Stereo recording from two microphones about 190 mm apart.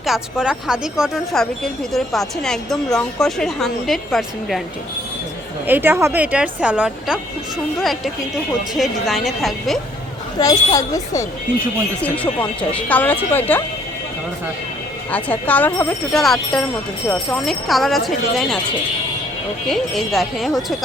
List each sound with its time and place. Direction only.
0.0 s speech: centre (ahead or behind)
5.6 s speech: 10° right (ahead or behind)
10.3 s a woman's voice: 20° left (ahead or behind)
15.1 s speech: 10° left (ahead or behind)
19.6 s speech: centre (ahead or behind)